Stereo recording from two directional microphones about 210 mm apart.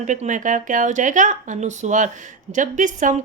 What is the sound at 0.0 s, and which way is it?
Speech, 35° right (ahead or behind).